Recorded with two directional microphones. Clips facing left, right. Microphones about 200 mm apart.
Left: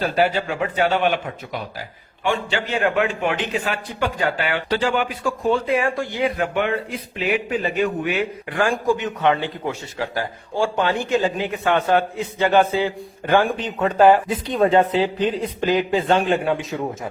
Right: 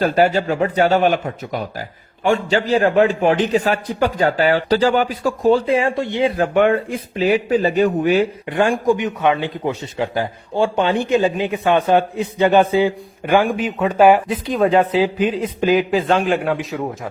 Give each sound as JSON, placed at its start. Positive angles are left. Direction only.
{"t": 0.0, "sound": "a man's voice", "side_deg": -45}
{"t": 6.5, "sound": "a man's voice", "side_deg": -50}
{"t": 8.4, "sound": "a man's voice", "side_deg": -20}
{"t": 14.9, "sound": "a man's voice", "side_deg": -10}
{"t": 15.9, "sound": "a man's voice", "side_deg": 0}